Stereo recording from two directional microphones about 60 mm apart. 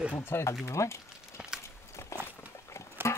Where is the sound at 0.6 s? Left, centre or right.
Left.